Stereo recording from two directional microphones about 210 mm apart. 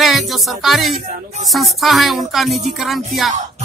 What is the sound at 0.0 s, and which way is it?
Speech, centre (ahead or behind).